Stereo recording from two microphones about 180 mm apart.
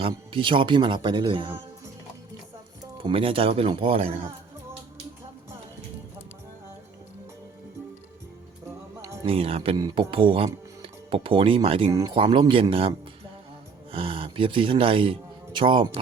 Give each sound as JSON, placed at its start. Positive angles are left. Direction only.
{"t": 0.0, "sound": "speech", "side_deg": -30}
{"t": 3.0, "sound": "speech", "side_deg": -30}
{"t": 9.0, "sound": "music", "side_deg": -15}
{"t": 9.2, "sound": "speech", "side_deg": -30}
{"t": 9.7, "sound": "speech", "side_deg": -20}
{"t": 11.9, "sound": "speech", "side_deg": -15}
{"t": 12.1, "sound": "speech", "side_deg": -30}
{"t": 13.9, "sound": "speech", "side_deg": -30}